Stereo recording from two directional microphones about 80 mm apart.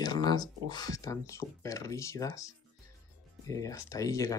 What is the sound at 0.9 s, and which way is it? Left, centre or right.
Speech, left.